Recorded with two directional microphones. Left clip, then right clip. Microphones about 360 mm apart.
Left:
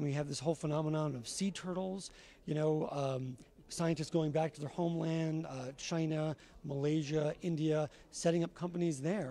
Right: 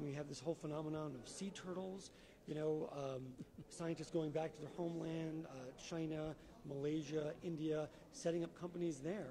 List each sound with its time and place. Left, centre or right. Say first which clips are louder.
0.0 s speech: left 9 dB; left